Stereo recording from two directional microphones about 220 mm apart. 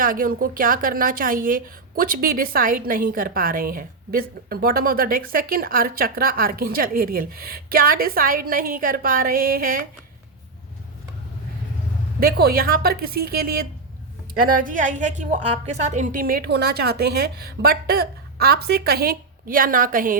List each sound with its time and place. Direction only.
0.0 s a woman's voice: 40° right (ahead or behind)
12.2 s a woman's voice: 45° right (ahead or behind)